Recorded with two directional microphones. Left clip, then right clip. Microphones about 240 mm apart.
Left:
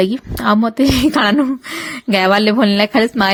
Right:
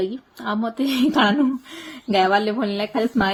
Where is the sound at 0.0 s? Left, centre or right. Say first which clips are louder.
Left 10 dB; left.